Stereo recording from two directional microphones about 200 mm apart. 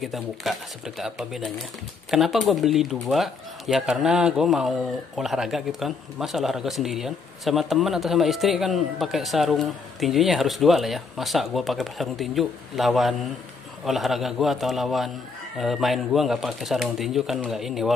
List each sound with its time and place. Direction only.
0.0 s speech: centre (ahead or behind)